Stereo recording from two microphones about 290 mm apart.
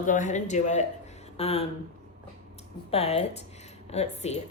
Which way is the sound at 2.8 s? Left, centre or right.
Left.